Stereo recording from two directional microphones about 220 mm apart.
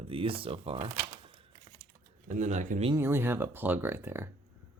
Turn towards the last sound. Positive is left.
turn(degrees=-10)  # may be behind; listen again after turning